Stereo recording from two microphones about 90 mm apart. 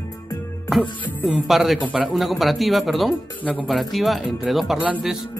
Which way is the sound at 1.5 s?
5° right (ahead or behind).